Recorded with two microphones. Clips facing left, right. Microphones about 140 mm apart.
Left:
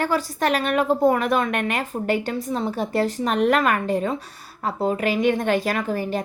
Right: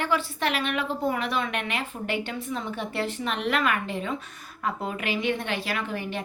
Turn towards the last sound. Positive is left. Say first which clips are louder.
# left 7 dB
turn(degrees=40)  # may be behind; listen again after turning